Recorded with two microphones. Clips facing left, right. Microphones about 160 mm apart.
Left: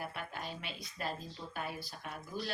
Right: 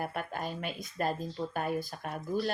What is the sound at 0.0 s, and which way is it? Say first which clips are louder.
Speech: right 7 dB; 50° right (ahead or behind).